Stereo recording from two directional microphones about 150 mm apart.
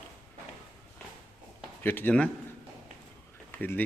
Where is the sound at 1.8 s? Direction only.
15° left (ahead or behind).